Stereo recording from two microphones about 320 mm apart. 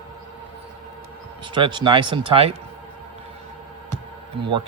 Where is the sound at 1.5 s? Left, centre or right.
Centre.